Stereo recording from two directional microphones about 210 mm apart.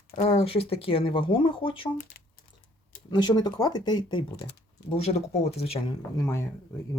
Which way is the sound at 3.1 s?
20° left (ahead or behind).